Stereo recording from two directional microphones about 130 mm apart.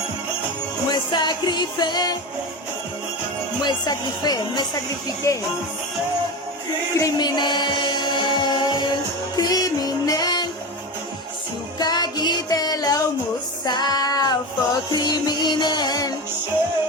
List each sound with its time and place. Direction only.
0.9 s music: 35° left (ahead or behind)
3.6 s speech: 35° left (ahead or behind)
5.2 s music: 25° left (ahead or behind)
7.0 s music: 35° left (ahead or behind)
11.8 s music: 30° left (ahead or behind)